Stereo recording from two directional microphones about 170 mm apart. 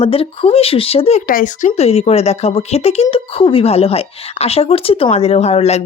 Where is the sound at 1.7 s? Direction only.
40° left (ahead or behind).